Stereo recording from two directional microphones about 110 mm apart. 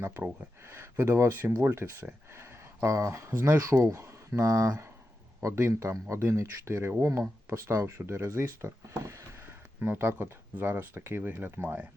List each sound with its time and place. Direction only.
0.0 s speech: 20° right (ahead or behind)